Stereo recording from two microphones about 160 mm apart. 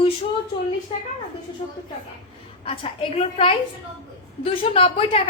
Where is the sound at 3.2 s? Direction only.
40° left (ahead or behind).